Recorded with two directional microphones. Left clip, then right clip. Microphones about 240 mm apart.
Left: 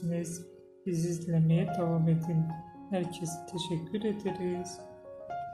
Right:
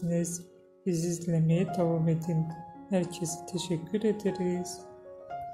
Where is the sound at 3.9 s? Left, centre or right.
Right.